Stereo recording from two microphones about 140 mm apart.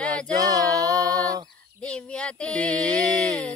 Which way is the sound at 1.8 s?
5° left (ahead or behind).